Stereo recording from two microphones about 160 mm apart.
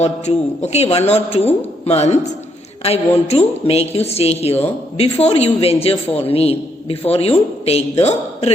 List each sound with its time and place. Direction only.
0.0 s a man's voice: 45° left (ahead or behind)